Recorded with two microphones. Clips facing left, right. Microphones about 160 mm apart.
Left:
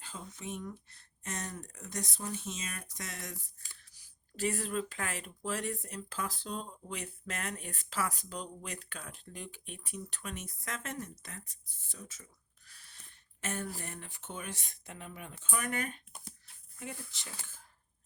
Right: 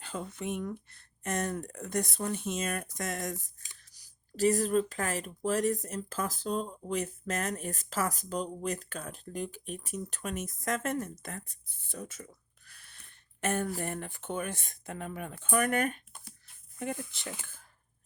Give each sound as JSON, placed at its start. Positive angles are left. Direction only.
{"t": 0.0, "sound": "speech", "side_deg": -65}